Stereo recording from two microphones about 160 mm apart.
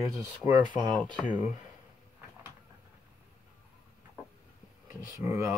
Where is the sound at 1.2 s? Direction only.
10° right (ahead or behind).